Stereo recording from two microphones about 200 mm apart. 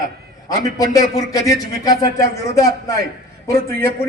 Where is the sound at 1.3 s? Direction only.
15° left (ahead or behind).